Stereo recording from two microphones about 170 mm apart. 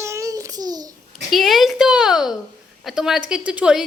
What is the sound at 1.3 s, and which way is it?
Speech, centre (ahead or behind).